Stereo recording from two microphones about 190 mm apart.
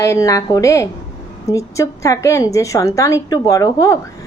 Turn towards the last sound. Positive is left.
turn(degrees=15)  # may be behind; listen again after turning